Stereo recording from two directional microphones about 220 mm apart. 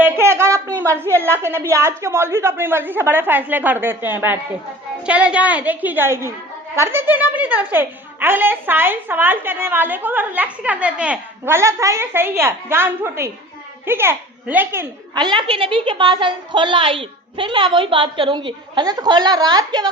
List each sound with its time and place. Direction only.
0.0 s a woman's voice: 10° right (ahead or behind)